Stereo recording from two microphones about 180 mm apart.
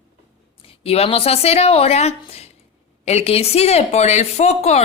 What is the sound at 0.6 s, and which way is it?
A woman's voice, 35° left (ahead or behind).